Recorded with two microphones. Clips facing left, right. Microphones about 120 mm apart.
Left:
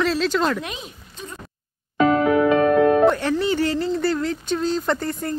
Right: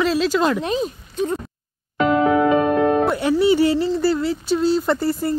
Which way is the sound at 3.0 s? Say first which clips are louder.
Right 1 dB; 10° right (ahead or behind).